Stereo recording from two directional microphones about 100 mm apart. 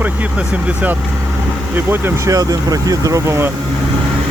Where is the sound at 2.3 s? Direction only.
35° right (ahead or behind).